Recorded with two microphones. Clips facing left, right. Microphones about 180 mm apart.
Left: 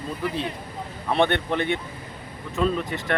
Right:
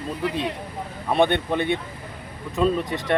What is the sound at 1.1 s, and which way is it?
Speech, 15° right (ahead or behind).